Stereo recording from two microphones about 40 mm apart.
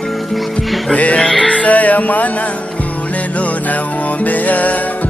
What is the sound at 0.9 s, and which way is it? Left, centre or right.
Music, left.